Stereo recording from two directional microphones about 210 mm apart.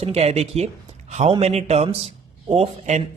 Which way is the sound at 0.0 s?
30° right (ahead or behind).